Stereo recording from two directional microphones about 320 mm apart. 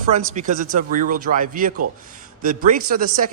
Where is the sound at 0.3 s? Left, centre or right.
Right.